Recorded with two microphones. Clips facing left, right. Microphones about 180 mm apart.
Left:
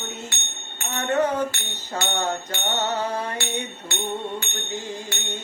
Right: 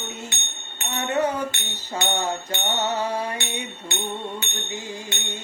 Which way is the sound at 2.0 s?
10° right (ahead or behind).